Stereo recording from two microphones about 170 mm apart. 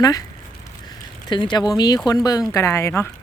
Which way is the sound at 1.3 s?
25° left (ahead or behind).